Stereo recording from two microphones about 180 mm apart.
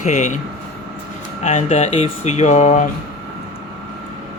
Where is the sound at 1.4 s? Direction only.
40° left (ahead or behind).